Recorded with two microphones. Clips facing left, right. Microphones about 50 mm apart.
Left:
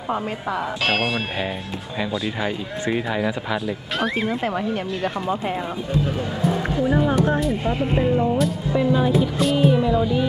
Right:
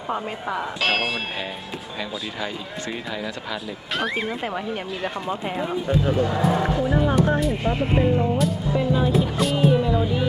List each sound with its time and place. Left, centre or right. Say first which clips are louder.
0.1 s speech: left 2 dB; centre
2.0 s speech: left 6 dB; centre
4.0 s speech: left 3 dB; centre
8.7 s speech: left 4 dB; centre
9.1 s speech: left 2 dB; centre